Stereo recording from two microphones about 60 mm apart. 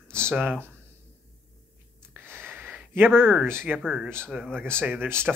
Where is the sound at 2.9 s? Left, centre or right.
Right.